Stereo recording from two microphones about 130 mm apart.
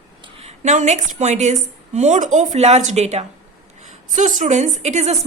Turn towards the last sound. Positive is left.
turn(degrees=-60)  # may be behind; listen again after turning